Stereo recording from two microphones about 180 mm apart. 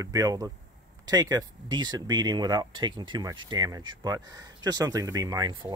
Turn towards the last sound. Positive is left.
turn(degrees=-25)  # may be behind; listen again after turning